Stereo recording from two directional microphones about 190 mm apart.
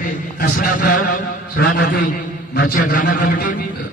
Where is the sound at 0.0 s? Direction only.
50° left (ahead or behind).